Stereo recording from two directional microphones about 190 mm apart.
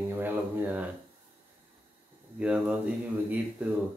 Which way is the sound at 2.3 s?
5° right (ahead or behind).